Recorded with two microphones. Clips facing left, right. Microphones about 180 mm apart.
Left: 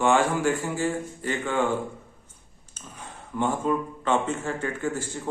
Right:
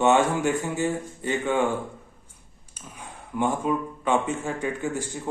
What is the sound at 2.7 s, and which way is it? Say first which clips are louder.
A man's voice: even; 10° right (ahead or behind).